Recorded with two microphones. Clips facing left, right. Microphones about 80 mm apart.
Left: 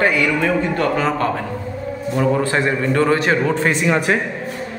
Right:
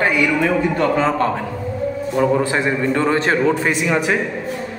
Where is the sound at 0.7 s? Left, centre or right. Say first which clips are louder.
Right 2 dB; right.